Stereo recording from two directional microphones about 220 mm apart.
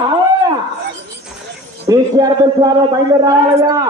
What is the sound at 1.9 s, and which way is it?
A man's voice, 15° right (ahead or behind).